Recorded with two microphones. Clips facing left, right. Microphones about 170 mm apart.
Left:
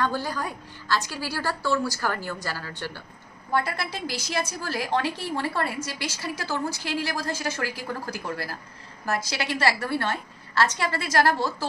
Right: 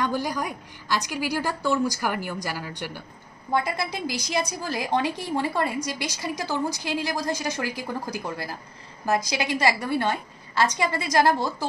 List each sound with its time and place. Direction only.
0.0 s a woman's voice: 15° right (ahead or behind)